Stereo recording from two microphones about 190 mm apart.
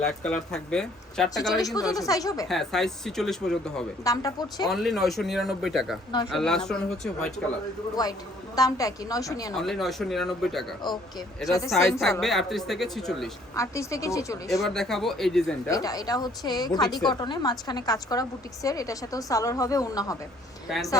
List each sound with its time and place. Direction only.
0.0 s speech: 5° left (ahead or behind)
1.4 s a woman's voice: 20° left (ahead or behind)
2.5 s speech: centre (ahead or behind)
4.0 s a woman's voice: 20° left (ahead or behind)
4.7 s speech: centre (ahead or behind)
8.0 s a woman's voice: 20° left (ahead or behind)
9.6 s speech: centre (ahead or behind)
13.6 s a woman's voice: 15° left (ahead or behind)
14.6 s speech: centre (ahead or behind)
15.7 s a woman's voice: 20° left (ahead or behind)